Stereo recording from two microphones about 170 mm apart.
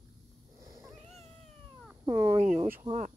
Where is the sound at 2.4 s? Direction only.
45° right (ahead or behind).